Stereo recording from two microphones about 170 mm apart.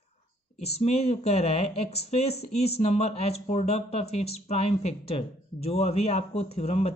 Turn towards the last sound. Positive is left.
turn(degrees=35)  # may be behind; listen again after turning